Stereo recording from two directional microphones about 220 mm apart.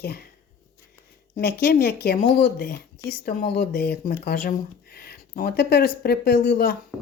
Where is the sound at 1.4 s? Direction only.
40° left (ahead or behind).